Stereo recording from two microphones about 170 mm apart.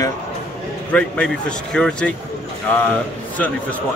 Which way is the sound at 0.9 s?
5° left (ahead or behind).